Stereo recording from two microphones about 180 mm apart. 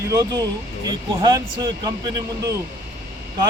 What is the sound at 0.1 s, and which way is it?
Speech, 20° right (ahead or behind).